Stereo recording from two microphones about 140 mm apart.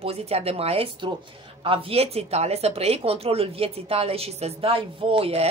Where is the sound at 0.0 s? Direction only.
45° right (ahead or behind).